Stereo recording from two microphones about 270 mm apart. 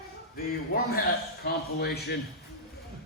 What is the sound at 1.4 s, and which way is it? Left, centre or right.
Speech, left.